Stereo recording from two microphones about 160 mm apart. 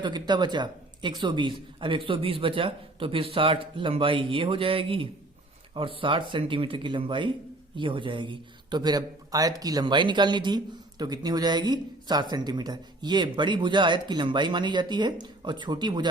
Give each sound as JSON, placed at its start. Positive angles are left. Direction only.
{"t": 0.0, "sound": "a man's voice", "side_deg": -30}